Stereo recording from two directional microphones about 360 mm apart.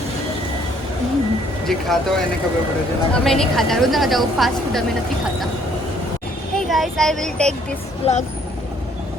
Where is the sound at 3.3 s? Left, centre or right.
Centre.